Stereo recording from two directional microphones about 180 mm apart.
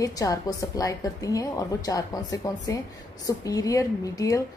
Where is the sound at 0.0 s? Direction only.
20° left (ahead or behind).